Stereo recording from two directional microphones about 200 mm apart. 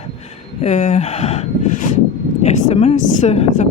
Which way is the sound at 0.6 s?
40° left (ahead or behind).